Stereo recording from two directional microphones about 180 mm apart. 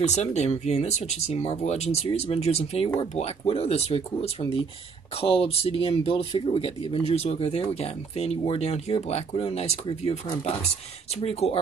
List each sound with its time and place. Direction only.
0.0 s speech: 40° left (ahead or behind)
11.1 s speech: 35° left (ahead or behind)